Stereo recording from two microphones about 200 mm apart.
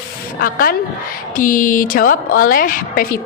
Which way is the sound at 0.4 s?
45° left (ahead or behind).